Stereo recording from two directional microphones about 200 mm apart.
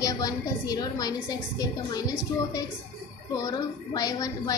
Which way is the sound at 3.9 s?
20° left (ahead or behind).